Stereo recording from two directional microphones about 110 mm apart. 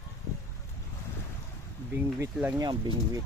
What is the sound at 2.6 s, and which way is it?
Speech, 40° right (ahead or behind).